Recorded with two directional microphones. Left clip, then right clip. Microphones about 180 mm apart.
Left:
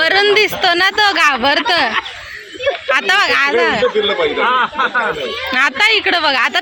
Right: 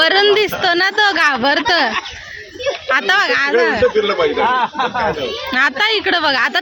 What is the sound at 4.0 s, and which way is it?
Speech, 35° left (ahead or behind).